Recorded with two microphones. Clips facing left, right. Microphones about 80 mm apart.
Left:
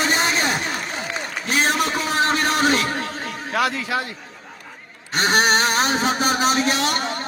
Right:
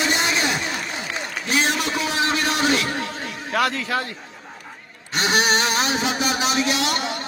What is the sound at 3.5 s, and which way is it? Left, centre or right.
Speech, centre.